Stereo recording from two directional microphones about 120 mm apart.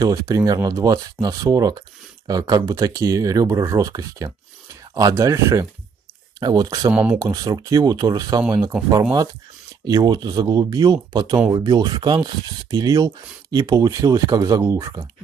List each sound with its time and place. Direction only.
0.0 s speech: 25° right (ahead or behind)
6.9 s speech: 10° right (ahead or behind)
7.2 s speech: 35° right (ahead or behind)
9.8 s speech: 30° right (ahead or behind)